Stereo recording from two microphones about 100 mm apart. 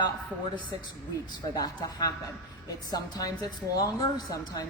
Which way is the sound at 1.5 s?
40° left (ahead or behind).